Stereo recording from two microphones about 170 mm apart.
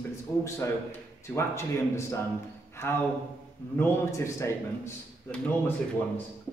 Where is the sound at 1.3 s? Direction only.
15° left (ahead or behind).